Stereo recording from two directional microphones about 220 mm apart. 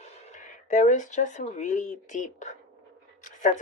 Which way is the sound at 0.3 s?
35° left (ahead or behind).